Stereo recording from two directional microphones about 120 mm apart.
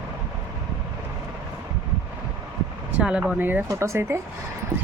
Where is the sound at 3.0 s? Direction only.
10° right (ahead or behind).